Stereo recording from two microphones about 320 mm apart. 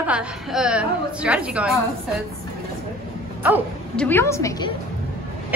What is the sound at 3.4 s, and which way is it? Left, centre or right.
Bow-wow, centre.